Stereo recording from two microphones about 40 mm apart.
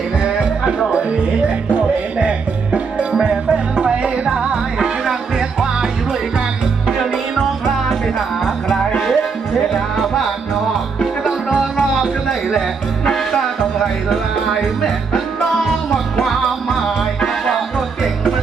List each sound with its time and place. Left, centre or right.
0.2 s music: right
2.1 s music: right
8.5 s music: centre
17.6 s music: centre